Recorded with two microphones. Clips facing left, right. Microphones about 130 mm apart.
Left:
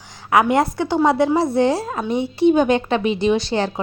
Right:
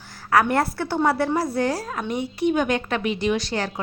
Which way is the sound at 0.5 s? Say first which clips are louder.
Left 5 dB; 15° left (ahead or behind).